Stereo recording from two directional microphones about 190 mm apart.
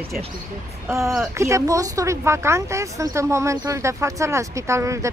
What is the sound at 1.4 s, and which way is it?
Speech, 15° right (ahead or behind).